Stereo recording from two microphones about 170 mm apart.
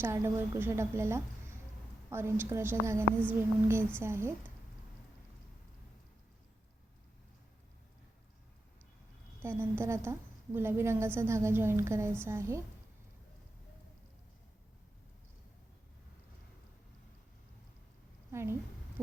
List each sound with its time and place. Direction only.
0.0 s a woman's voice: 15° right (ahead or behind)
9.4 s a woman's voice: 15° right (ahead or behind)
18.3 s a woman's voice: 15° right (ahead or behind)
19.0 s owl: 15° right (ahead or behind)